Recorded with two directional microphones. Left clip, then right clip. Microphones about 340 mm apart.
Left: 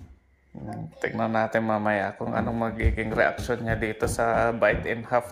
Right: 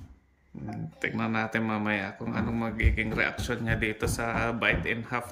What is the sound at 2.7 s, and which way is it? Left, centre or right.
Speech, centre.